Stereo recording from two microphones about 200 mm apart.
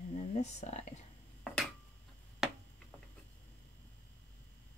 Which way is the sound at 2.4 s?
Centre (ahead or behind).